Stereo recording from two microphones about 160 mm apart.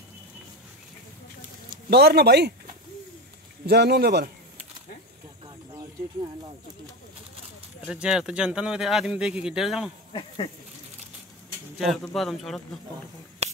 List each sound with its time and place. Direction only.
1.9 s speech: 85° right
7.9 s speech: 5° right (ahead or behind)
10.1 s a sound: 35° left (ahead or behind)
11.8 s speech: centre (ahead or behind)